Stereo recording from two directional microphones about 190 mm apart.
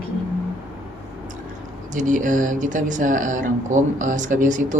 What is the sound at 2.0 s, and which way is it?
Speech, 40° right (ahead or behind).